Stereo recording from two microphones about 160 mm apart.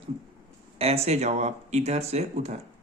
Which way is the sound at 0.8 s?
40° right (ahead or behind).